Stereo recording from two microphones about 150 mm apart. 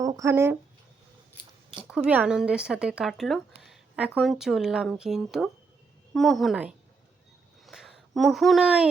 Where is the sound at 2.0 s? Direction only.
10° right (ahead or behind).